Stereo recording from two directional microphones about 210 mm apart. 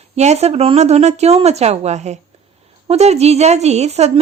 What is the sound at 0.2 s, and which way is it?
A woman's voice, 30° right (ahead or behind).